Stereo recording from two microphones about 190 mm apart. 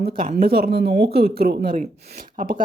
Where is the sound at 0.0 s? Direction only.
50° right (ahead or behind).